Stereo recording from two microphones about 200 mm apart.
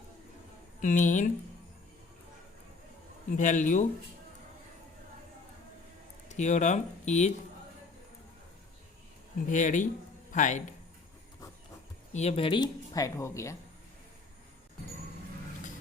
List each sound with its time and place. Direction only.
0.8 s speech: 40° left (ahead or behind)
3.3 s speech: 40° left (ahead or behind)
6.2 s speech: 35° left (ahead or behind)
9.5 s speech: 40° left (ahead or behind)
12.1 s speech: 30° left (ahead or behind); by 13.6 s 15° left (ahead or behind)